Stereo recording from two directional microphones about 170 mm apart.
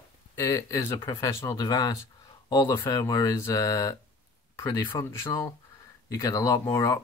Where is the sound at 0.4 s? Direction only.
20° left (ahead or behind).